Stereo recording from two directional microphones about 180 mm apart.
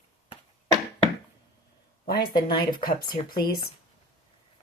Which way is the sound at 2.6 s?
50° left (ahead or behind).